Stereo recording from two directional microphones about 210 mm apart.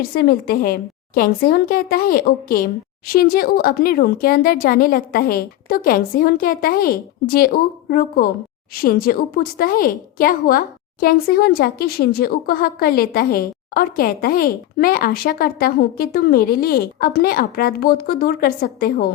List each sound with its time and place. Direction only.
0.0 s speech: 45° left (ahead or behind)